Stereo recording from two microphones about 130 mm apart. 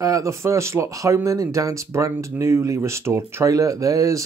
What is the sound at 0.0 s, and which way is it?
Speech, 25° right (ahead or behind).